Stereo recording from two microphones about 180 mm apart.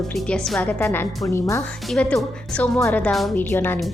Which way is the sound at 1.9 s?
5° left (ahead or behind).